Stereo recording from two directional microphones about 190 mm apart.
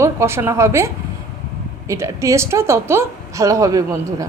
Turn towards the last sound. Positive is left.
turn(degrees=-15)  # may be behind; listen again after turning